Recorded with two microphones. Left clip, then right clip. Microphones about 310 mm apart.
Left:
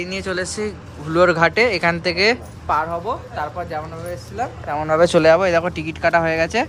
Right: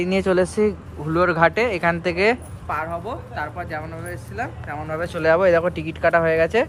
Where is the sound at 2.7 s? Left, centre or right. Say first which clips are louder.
Left 6 dB; centre.